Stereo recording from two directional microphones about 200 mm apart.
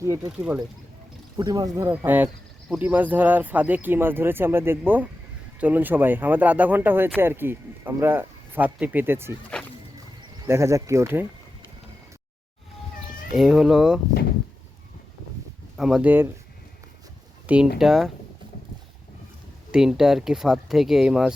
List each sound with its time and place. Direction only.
0.0 s speech: 15° right (ahead or behind)
0.3 s speech: 5° right (ahead or behind)
1.4 s speech: 20° right (ahead or behind)
9.5 s speech: 5° left (ahead or behind)
10.4 s speech: 15° right (ahead or behind)
13.3 s speech: centre (ahead or behind)
15.8 s speech: 5° right (ahead or behind)
17.4 s a sound: 5° right (ahead or behind)
17.7 s speech: centre (ahead or behind)
19.7 s speech: centre (ahead or behind)